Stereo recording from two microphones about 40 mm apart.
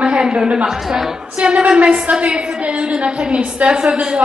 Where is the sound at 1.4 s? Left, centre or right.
Right.